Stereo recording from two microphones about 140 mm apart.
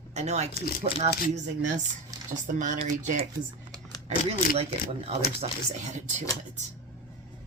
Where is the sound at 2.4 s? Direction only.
65° right (ahead or behind).